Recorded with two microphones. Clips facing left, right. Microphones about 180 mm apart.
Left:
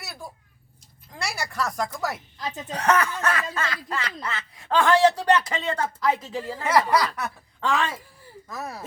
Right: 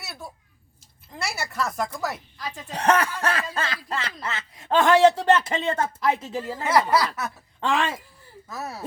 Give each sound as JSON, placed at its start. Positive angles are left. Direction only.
{"t": 0.0, "sound": "a sound", "side_deg": 0}
{"t": 1.1, "sound": "speech", "side_deg": 0}
{"t": 2.4, "sound": "speech", "side_deg": 25}
{"t": 2.7, "sound": "a man's voice", "side_deg": -30}
{"t": 6.7, "sound": "speech", "side_deg": -5}
{"t": 7.6, "sound": "a man's voice", "side_deg": -20}
{"t": 8.4, "sound": "speech", "side_deg": -5}